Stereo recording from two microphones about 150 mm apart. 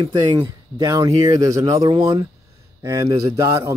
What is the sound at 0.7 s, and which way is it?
Speech, 25° right (ahead or behind).